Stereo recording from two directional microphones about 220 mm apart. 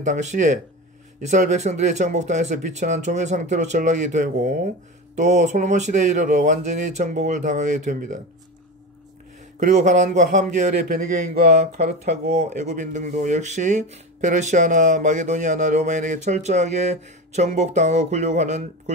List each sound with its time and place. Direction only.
0.0 s speech: 35° right (ahead or behind)
9.6 s speech: 35° right (ahead or behind)
12.4 s speech: 30° right (ahead or behind)